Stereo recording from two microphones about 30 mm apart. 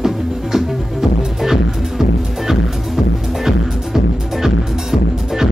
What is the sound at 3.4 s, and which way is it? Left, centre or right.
Music, centre.